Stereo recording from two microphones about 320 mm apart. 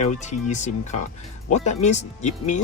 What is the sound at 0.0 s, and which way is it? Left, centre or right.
Speech, left.